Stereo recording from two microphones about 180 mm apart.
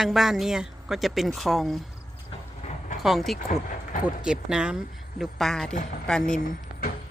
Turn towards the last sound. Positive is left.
turn(degrees=50)  # may be behind; listen again after turning